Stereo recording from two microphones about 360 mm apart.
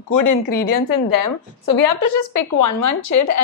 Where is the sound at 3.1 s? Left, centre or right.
Left.